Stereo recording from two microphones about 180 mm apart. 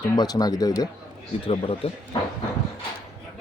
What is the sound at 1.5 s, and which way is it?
Speech, 30° left (ahead or behind).